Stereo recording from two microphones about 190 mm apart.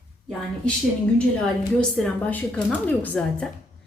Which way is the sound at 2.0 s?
5° left (ahead or behind).